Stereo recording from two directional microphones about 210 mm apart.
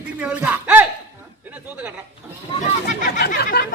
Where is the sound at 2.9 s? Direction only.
35° left (ahead or behind).